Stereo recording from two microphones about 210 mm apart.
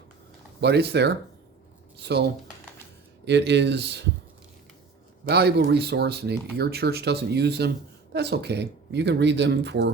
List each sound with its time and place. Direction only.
0.6 s speech: 50° right (ahead or behind)
5.3 s speech: 50° right (ahead or behind)